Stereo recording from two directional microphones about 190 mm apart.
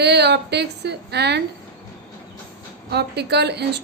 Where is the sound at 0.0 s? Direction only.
60° right (ahead or behind).